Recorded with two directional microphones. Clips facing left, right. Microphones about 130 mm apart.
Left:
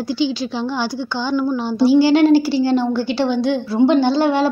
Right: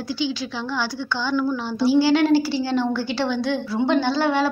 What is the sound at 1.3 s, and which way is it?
A woman's voice, 25° left (ahead or behind).